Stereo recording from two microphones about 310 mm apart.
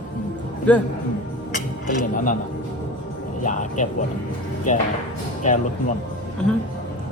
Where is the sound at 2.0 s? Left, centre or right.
Left.